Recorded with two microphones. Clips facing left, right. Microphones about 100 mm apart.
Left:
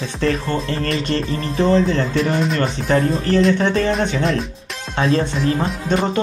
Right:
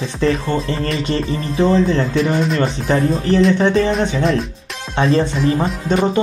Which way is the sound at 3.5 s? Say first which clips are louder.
Right 3 dB; 15° right (ahead or behind).